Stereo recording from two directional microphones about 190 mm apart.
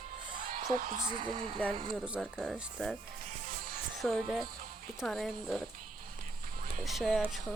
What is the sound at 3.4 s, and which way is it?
Music, 45° right (ahead or behind).